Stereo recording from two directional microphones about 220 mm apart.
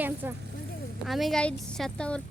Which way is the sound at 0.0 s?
10° right (ahead or behind).